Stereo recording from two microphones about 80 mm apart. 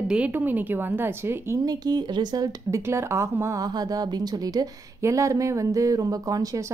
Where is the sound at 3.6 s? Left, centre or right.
Right.